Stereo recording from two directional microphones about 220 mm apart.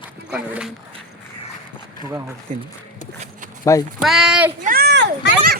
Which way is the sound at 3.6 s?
15° left (ahead or behind).